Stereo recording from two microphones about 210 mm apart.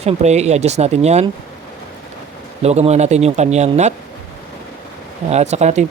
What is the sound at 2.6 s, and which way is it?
Speech, 30° right (ahead or behind).